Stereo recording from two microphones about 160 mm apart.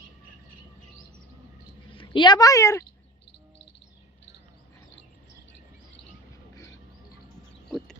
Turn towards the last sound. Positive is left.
turn(degrees=0)  # may be behind; listen again after turning